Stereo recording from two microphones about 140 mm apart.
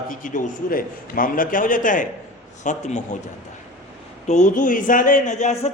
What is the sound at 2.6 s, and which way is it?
Speech, 60° left (ahead or behind).